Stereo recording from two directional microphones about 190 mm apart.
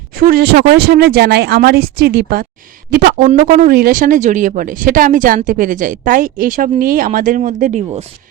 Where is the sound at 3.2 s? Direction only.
45° right (ahead or behind).